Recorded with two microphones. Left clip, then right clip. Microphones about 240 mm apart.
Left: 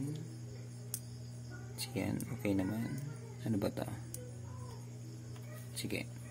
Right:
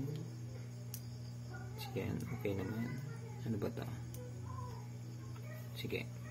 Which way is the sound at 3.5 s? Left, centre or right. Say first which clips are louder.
Left 5 dB; left.